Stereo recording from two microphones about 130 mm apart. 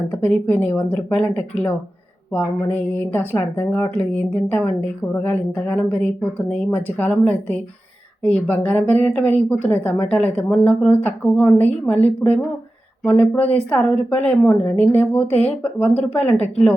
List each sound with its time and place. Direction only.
0.1 s a woman's voice: 15° left (ahead or behind)
13.1 s a woman's voice: 10° left (ahead or behind)
13.4 s a woman's voice: 50° left (ahead or behind)
13.7 s a woman's voice: 10° left (ahead or behind)